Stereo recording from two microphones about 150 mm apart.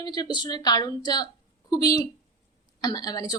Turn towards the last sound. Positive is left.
turn(degrees=25)  # may be behind; listen again after turning